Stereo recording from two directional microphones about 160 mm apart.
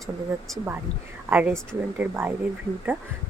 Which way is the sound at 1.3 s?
10° right (ahead or behind).